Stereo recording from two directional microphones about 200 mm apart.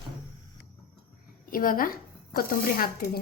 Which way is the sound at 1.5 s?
45° left (ahead or behind).